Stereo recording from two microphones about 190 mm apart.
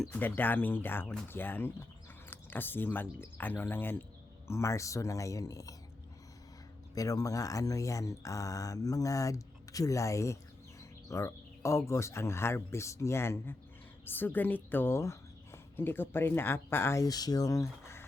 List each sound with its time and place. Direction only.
0.0 s speech: 10° left (ahead or behind)
6.9 s a woman's voice: 20° left (ahead or behind)